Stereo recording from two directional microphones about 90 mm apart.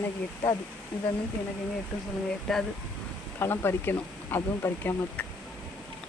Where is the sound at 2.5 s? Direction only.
5° left (ahead or behind).